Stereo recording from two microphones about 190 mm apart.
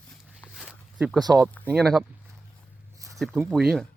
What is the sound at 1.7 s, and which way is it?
Speech, centre (ahead or behind).